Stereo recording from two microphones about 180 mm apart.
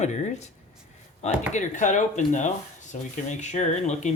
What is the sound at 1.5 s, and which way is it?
Speech, 45° left (ahead or behind).